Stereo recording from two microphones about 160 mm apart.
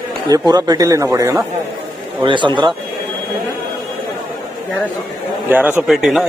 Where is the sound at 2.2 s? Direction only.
30° right (ahead or behind).